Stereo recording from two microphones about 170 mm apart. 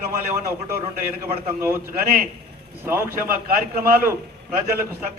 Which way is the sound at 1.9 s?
55° right (ahead or behind).